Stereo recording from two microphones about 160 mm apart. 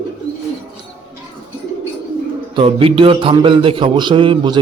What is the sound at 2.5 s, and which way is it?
A man's voice, 35° right (ahead or behind).